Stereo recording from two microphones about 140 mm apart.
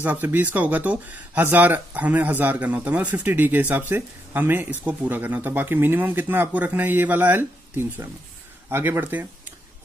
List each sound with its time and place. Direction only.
0.0 s speech: 15° right (ahead or behind)